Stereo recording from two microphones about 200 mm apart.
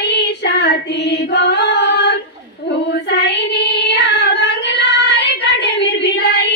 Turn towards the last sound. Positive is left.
turn(degrees=60)  # may be behind; listen again after turning